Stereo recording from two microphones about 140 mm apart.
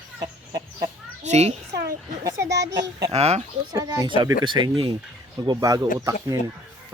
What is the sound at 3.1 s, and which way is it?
Speech, 50° right (ahead or behind).